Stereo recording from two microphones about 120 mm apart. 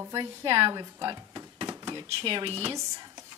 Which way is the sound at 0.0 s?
30° right (ahead or behind).